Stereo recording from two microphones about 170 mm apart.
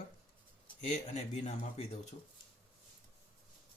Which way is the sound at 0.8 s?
45° left (ahead or behind).